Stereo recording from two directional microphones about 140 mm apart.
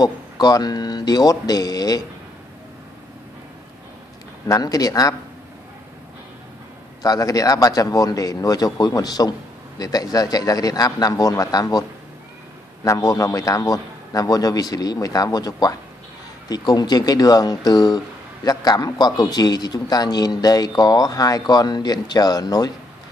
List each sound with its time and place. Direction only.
0.0 s speech: 30° left (ahead or behind)
4.5 s speech: 25° left (ahead or behind)
7.0 s speech: 25° left (ahead or behind)
12.8 s speech: 25° left (ahead or behind)